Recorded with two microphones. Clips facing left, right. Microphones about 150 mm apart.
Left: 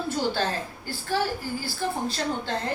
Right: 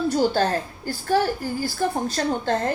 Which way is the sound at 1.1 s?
45° right (ahead or behind).